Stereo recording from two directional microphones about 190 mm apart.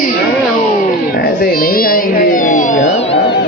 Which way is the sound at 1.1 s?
50° left (ahead or behind).